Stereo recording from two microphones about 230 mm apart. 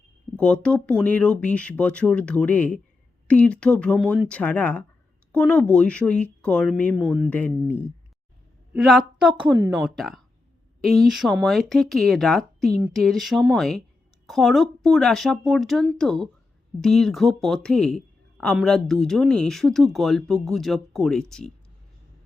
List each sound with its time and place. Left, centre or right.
0.3 s a woman's voice: centre
7.3 s a woman's voice: centre
9.4 s a woman's voice: centre
9.8 s a woman's voice: centre